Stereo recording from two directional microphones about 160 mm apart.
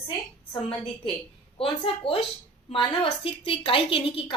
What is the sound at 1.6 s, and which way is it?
A woman's voice, 35° left (ahead or behind).